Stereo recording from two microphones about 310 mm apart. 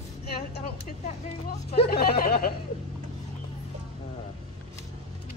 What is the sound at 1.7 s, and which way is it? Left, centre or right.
Speech, left.